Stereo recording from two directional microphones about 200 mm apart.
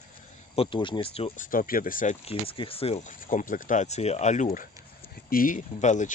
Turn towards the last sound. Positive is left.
turn(degrees=35)  # may be behind; listen again after turning